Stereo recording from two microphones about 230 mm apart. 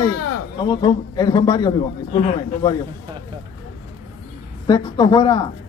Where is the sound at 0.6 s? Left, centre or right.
Centre.